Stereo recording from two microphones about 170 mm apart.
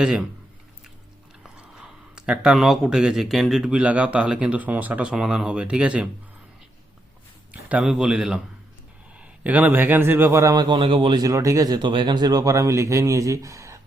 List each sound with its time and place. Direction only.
0.0 s speech: 5° right (ahead or behind)
1.5 s speech: 5° right (ahead or behind)
7.5 s speech: 5° right (ahead or behind)